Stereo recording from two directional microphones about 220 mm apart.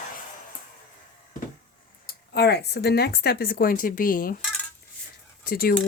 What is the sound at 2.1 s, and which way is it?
Speech, 50° left (ahead or behind).